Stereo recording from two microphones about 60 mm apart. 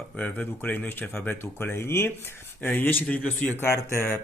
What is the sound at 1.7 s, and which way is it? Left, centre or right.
Speech, left.